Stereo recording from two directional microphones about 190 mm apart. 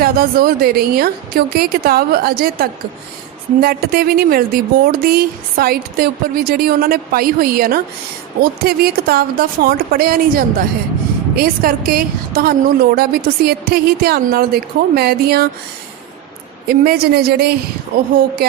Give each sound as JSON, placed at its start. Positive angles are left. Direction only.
{"t": 0.0, "sound": "a woman's voice", "side_deg": -50}
{"t": 16.6, "sound": "speech", "side_deg": -55}